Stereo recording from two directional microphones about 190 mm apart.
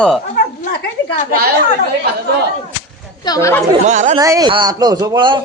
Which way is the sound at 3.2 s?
15° left (ahead or behind).